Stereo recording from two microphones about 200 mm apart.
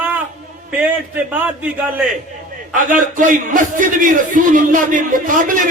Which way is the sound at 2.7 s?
40° right (ahead or behind).